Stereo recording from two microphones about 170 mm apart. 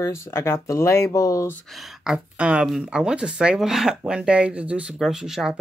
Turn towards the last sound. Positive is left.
turn(degrees=-5)  # may be behind; listen again after turning